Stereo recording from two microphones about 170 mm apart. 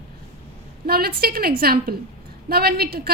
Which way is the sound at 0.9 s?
65° right (ahead or behind).